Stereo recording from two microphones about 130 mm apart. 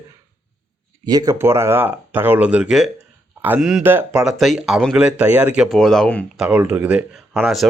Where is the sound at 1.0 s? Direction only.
30° right (ahead or behind); by 5.6 s 10° right (ahead or behind).